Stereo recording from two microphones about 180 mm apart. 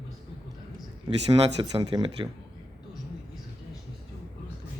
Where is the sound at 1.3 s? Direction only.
25° right (ahead or behind).